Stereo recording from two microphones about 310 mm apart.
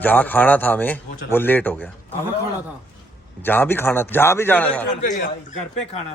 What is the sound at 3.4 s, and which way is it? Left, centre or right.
A man's voice, centre.